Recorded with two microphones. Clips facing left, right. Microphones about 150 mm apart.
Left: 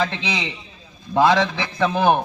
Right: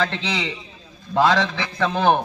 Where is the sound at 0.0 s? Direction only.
15° left (ahead or behind).